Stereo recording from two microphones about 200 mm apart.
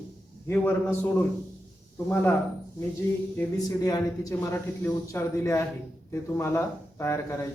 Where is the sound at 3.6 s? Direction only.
15° left (ahead or behind).